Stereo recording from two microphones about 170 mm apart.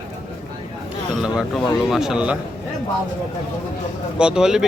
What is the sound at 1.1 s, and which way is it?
A man's voice, 5° right (ahead or behind).